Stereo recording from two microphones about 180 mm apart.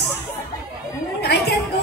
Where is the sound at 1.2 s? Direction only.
65° left (ahead or behind).